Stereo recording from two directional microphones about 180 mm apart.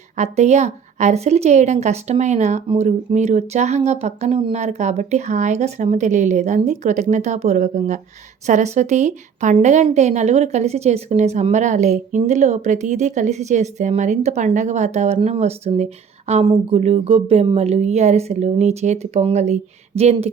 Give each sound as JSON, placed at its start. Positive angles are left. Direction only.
{"t": 0.2, "sound": "a woman's voice", "side_deg": -40}